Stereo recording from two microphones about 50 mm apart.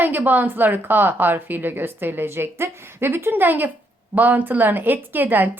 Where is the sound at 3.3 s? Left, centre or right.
Right.